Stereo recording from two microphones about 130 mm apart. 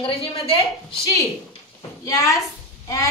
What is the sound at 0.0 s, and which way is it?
Speech, 45° left (ahead or behind).